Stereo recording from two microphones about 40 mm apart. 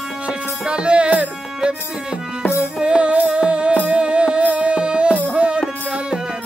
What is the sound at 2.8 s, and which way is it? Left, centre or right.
Music, right.